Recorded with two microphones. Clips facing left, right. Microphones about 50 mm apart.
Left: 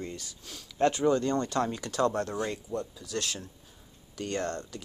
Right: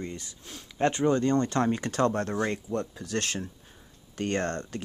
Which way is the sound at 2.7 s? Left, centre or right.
Right.